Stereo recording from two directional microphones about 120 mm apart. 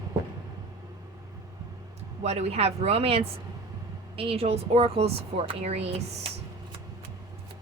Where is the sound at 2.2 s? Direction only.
65° right (ahead or behind).